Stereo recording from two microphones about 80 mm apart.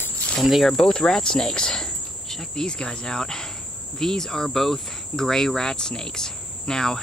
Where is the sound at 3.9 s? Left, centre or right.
Centre.